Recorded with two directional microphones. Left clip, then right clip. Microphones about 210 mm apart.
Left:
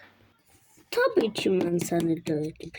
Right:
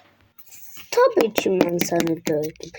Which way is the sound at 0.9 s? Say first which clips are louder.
Right 7 dB; 35° left (ahead or behind).